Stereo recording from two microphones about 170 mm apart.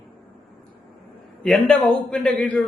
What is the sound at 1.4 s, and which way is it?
A man's voice, 5° left (ahead or behind).